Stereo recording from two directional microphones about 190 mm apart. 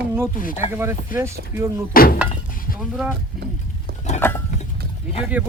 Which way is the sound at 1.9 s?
50° left (ahead or behind).